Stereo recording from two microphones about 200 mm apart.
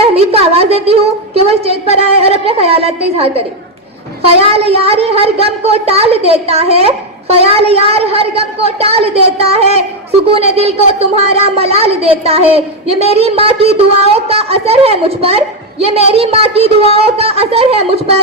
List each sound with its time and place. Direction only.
0.0 s a woman's voice: 30° right (ahead or behind)